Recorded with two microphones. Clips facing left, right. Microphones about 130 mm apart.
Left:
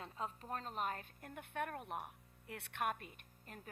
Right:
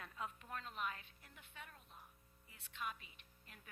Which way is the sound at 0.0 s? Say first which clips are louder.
Left 4 dB; 30° left (ahead or behind).